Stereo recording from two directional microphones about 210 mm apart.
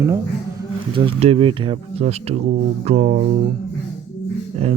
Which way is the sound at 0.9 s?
25° right (ahead or behind).